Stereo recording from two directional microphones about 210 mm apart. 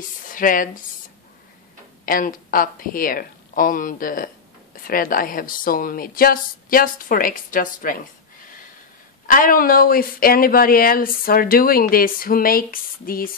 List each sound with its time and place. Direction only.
0.3 s speech: 40° left (ahead or behind)
2.0 s speech: 40° left (ahead or behind)
9.2 s speech: 40° left (ahead or behind)